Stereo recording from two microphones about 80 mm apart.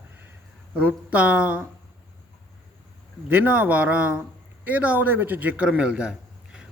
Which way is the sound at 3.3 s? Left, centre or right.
Right.